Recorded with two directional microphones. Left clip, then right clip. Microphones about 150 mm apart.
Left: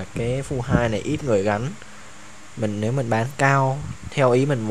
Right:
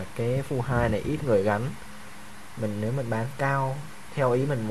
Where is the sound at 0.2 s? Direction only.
20° left (ahead or behind).